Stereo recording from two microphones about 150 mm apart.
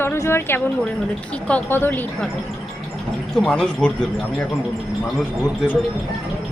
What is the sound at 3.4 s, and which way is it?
Speech, 5° left (ahead or behind).